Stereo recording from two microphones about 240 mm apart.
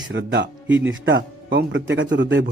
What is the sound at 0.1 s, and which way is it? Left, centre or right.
Speech, right.